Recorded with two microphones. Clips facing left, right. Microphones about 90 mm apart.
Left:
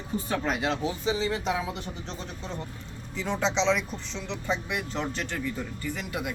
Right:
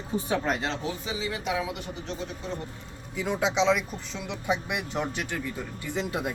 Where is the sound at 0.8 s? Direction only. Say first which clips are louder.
Left 4 dB; 25° left (ahead or behind).